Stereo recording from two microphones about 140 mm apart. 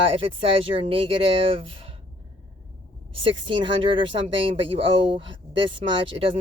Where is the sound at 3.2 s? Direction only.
35° right (ahead or behind).